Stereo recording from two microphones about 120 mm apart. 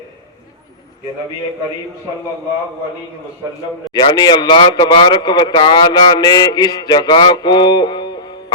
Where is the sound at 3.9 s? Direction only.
40° left (ahead or behind).